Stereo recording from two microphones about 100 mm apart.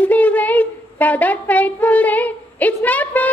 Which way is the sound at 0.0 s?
15° left (ahead or behind).